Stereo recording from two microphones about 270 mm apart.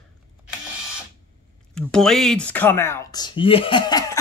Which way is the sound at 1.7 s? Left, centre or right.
Centre.